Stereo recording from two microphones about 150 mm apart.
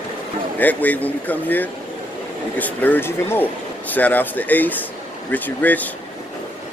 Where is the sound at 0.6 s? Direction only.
10° left (ahead or behind).